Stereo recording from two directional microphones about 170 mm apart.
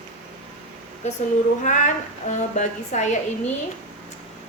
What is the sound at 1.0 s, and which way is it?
A woman's voice, 40° left (ahead or behind).